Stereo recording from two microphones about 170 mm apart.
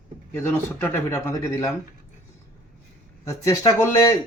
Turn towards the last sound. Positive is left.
turn(degrees=20)  # may be behind; listen again after turning